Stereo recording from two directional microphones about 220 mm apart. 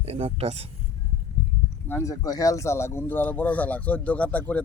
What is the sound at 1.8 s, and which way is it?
Speech, 10° left (ahead or behind).